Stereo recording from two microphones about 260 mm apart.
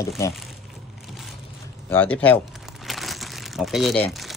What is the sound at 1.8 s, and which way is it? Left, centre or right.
Crumpling, centre.